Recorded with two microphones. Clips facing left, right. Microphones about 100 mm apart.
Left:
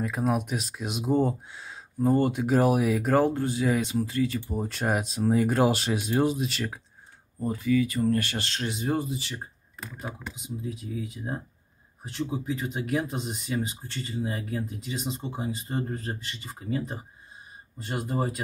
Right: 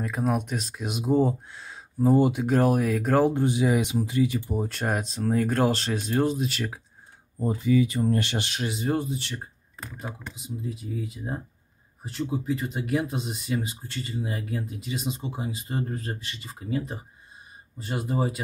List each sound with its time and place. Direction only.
0.0 s speech: centre (ahead or behind)
3.3 s speech: 20° right (ahead or behind)
4.6 s speech: centre (ahead or behind)
7.3 s speech: 20° right (ahead or behind)
8.6 s speech: centre (ahead or behind)